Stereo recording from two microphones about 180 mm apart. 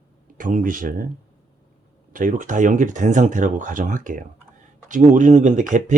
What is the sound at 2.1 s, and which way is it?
Speech, 45° right (ahead or behind).